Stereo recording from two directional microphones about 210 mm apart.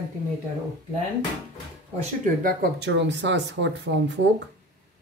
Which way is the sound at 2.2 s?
45° right (ahead or behind).